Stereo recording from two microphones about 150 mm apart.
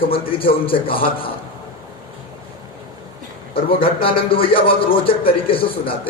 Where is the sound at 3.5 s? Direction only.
35° left (ahead or behind).